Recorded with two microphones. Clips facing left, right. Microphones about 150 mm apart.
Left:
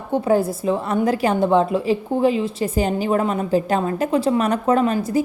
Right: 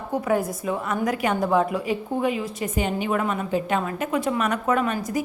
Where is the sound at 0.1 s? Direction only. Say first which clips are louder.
Left 5 dB; 30° left (ahead or behind).